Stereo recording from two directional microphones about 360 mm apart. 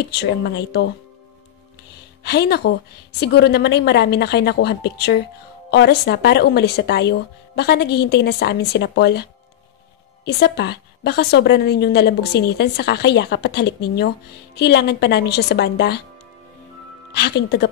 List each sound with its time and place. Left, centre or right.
0.0 s a woman's voice: left
2.2 s a woman's voice: left
17.1 s a woman's voice: left